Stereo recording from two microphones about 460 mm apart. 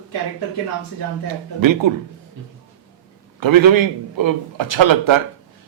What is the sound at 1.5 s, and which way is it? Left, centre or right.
Speech, right.